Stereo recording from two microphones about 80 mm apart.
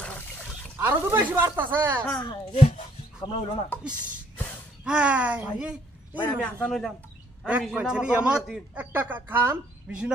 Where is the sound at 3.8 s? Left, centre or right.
Centre.